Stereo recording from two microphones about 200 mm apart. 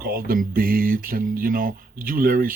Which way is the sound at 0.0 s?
45° right (ahead or behind).